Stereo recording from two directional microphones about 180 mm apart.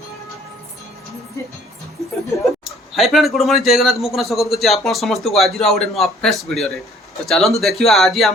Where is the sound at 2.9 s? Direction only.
Centre (ahead or behind).